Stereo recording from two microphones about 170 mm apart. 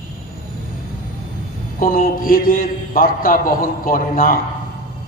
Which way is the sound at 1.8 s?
55° left (ahead or behind).